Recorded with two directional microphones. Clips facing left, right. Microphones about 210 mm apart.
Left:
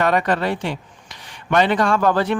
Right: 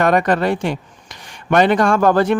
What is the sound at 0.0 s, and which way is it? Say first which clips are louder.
Speech: right 4 dB; 45° right (ahead or behind).